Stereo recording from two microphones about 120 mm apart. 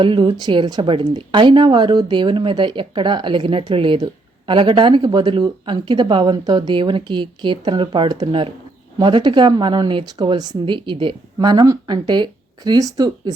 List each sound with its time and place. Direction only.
0.0 s speech: 40° right (ahead or behind)
8.3 s speech: 50° right (ahead or behind)
9.0 s speech: 40° right (ahead or behind)